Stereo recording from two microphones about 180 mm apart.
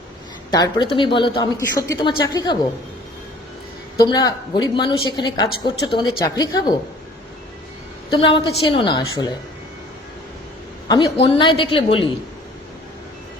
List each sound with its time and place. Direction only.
0.5 s a woman's voice: 25° left (ahead or behind)
3.9 s a woman's voice: 20° left (ahead or behind)
8.1 s a woman's voice: 30° left (ahead or behind)
10.8 s a woman's voice: 25° left (ahead or behind)